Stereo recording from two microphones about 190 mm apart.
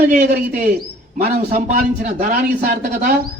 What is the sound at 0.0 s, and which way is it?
A man's voice, 45° right (ahead or behind).